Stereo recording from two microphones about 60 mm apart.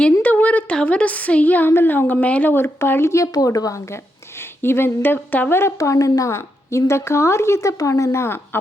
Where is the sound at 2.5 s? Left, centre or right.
Left.